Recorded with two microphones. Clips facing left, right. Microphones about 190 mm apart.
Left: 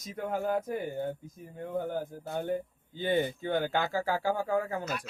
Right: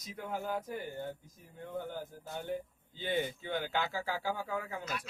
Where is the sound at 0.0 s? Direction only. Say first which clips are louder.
Left 7 dB; 50° left (ahead or behind).